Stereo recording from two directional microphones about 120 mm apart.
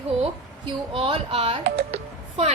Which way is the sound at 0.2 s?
50° right (ahead or behind).